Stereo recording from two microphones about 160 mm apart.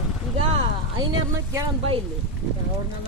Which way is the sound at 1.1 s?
30° right (ahead or behind).